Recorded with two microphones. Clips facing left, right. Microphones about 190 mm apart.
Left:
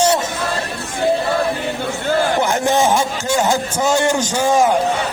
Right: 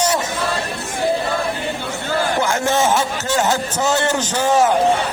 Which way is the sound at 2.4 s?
15° left (ahead or behind).